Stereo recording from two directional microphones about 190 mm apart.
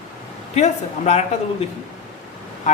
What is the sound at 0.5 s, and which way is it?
Speech, 35° left (ahead or behind).